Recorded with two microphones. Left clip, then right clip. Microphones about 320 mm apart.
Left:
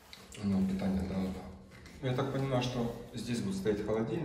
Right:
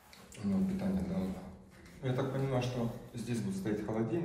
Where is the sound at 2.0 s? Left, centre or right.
Centre.